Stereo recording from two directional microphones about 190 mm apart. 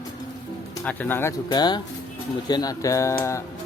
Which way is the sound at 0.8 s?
10° left (ahead or behind).